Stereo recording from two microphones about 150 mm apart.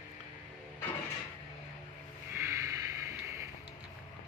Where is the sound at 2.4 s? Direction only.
20° right (ahead or behind).